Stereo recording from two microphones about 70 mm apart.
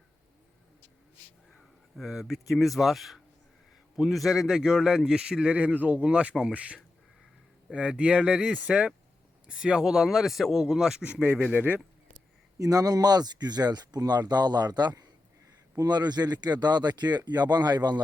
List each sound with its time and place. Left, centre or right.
2.0 s a man's voice: centre
12.5 s speech: right